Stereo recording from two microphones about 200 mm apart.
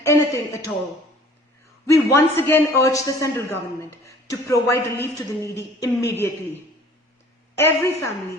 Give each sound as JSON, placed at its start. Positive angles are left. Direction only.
{"t": 0.0, "sound": "a man's voice", "side_deg": 15}
{"t": 1.9, "sound": "a man's voice", "side_deg": 10}